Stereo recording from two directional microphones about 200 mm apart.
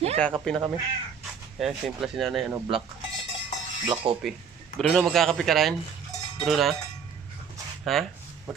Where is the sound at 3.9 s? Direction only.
25° right (ahead or behind).